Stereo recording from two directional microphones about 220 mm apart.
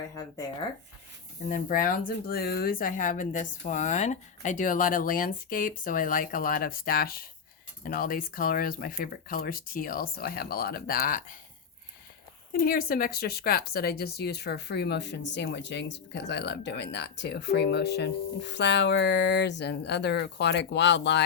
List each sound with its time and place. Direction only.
0.1 s speech: 15° left (ahead or behind)
1.5 s speech: 40° left (ahead or behind)
12.5 s speech: 40° left (ahead or behind)